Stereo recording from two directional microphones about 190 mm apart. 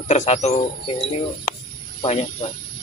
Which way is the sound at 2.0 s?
30° left (ahead or behind).